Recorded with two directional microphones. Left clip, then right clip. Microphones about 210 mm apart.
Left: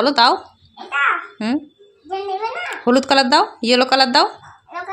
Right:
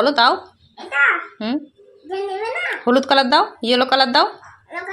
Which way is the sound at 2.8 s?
20° left (ahead or behind).